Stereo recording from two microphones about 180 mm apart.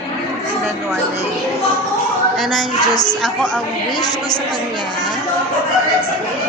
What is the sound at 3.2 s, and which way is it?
Speech, 5° left (ahead or behind).